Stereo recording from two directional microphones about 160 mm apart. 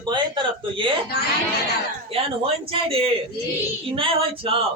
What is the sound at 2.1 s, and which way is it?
Speech, 35° right (ahead or behind).